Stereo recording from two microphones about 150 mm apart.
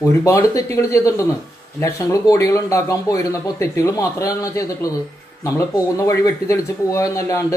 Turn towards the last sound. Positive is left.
turn(degrees=20)  # may be behind; listen again after turning